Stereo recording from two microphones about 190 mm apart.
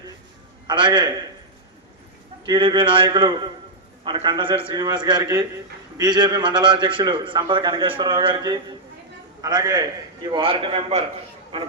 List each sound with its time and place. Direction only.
0.7 s a man's voice: 25° right (ahead or behind)
2.5 s a man's voice: 25° right (ahead or behind)